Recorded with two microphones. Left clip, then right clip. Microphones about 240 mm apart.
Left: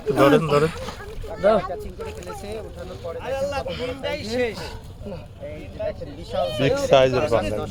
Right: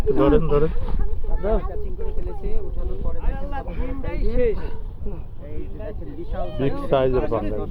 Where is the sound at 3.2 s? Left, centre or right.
Left.